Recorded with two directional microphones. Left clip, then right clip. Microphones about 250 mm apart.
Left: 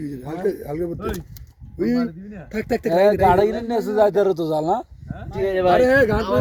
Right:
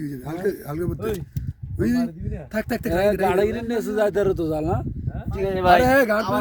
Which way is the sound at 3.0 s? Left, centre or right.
Centre.